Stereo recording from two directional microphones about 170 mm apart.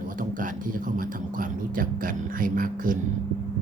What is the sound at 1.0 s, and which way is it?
Speech, 55° right (ahead or behind).